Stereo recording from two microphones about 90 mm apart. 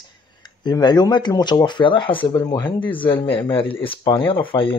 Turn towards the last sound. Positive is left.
turn(degrees=75)  # may be behind; listen again after turning